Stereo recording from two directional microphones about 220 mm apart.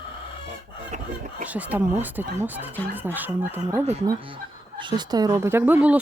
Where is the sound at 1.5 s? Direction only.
10° right (ahead or behind).